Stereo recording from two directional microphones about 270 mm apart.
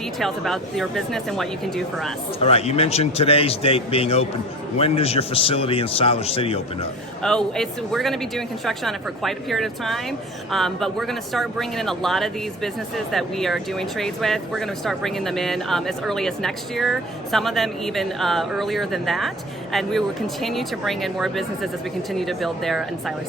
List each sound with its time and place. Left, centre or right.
0.2 s speech: centre
2.4 s speech: left
7.2 s speech: centre